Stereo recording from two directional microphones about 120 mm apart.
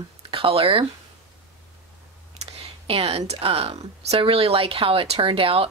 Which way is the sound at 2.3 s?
55° right (ahead or behind).